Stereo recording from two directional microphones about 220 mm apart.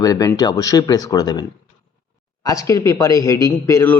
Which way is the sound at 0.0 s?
15° left (ahead or behind).